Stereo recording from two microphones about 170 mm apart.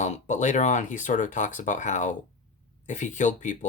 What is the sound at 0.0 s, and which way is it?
Speech, 45° left (ahead or behind).